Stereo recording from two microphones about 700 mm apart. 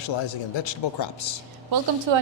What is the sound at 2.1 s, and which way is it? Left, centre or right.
Speech, right.